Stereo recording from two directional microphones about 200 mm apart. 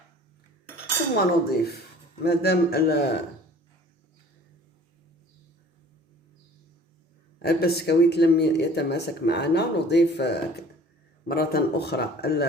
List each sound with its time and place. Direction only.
1.1 s speech: 50° left (ahead or behind)
7.4 s speech: 50° left (ahead or behind)